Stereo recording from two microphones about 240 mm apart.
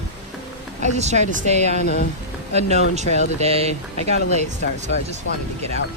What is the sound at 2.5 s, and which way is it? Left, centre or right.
Speech, right.